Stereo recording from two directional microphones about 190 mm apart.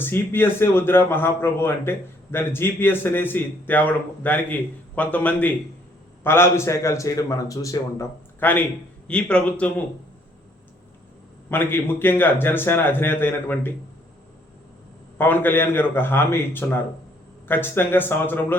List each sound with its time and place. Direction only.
0.0 s a man's voice: 10° left (ahead or behind)
11.4 s a man's voice: 10° left (ahead or behind)
15.2 s a man's voice: 10° left (ahead or behind)